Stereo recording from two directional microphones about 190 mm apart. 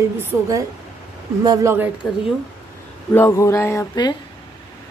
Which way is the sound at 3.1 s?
15° left (ahead or behind).